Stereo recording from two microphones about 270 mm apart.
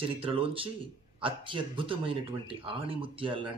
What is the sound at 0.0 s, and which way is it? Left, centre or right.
Speech, centre.